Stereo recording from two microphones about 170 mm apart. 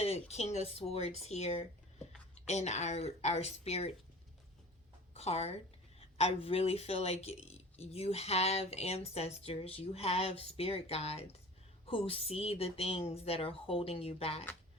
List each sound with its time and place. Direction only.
0.0 s speech: 40° left (ahead or behind)
5.1 s speech: 35° left (ahead or behind)